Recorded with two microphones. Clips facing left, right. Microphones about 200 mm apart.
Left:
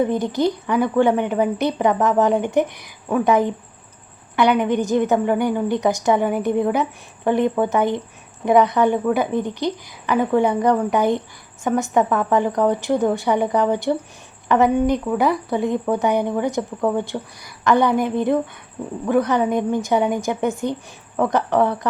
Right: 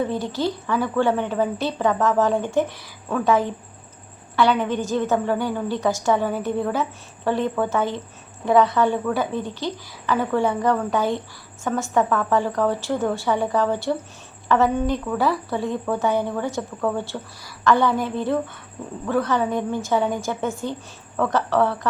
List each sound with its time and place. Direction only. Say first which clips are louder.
0.0 s speech: left 5 dB; 15° left (ahead or behind)